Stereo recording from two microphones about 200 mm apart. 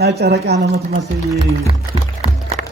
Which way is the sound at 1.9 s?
30° right (ahead or behind).